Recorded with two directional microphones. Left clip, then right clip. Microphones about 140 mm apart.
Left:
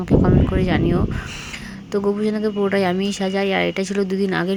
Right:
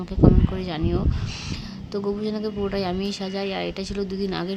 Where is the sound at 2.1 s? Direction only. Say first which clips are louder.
Left 5 dB; 15° left (ahead or behind).